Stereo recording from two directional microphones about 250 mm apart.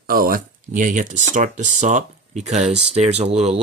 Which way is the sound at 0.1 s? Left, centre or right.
Right.